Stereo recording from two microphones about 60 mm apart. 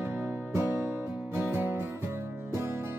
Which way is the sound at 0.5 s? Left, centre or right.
Right.